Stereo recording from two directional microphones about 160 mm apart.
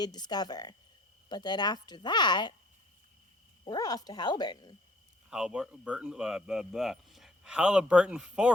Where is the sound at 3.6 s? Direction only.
25° left (ahead or behind).